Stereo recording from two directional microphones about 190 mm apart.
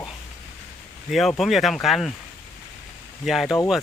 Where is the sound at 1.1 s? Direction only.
Centre (ahead or behind).